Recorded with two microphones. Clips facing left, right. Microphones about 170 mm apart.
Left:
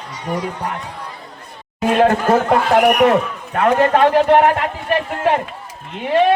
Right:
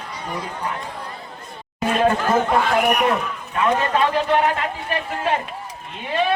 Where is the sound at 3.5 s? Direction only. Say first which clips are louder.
Left 6 dB; 60° left (ahead or behind).